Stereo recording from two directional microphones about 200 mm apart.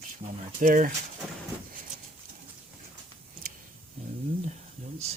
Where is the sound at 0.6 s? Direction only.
40° right (ahead or behind).